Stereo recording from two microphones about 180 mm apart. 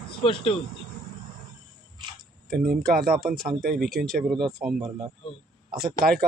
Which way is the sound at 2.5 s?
55° right (ahead or behind).